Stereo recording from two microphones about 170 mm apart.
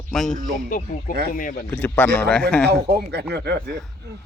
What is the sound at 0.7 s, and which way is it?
Speech, 50° left (ahead or behind).